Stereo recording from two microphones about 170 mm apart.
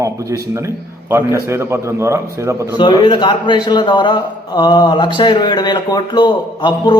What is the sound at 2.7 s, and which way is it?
A man's voice, 25° left (ahead or behind).